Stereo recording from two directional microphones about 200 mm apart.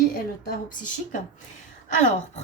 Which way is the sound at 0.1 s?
50° left (ahead or behind).